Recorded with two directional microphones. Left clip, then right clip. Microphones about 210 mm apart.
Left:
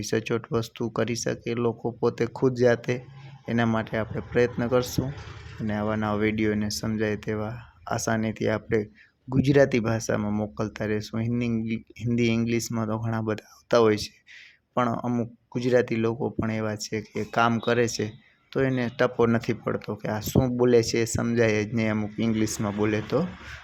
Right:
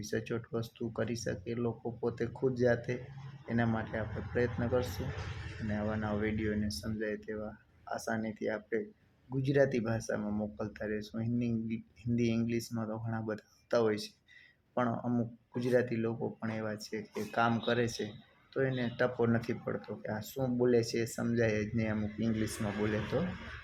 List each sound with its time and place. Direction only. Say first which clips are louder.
0.0 s speech: left 10 dB; 45° left (ahead or behind)